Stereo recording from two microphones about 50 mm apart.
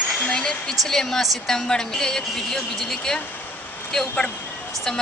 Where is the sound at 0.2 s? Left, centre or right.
Centre.